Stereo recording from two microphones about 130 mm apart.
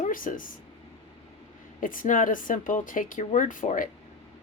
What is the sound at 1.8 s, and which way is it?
Speech, 90° left.